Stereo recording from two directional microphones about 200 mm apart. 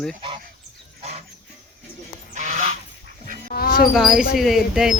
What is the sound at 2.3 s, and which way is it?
Goose, 40° right (ahead or behind).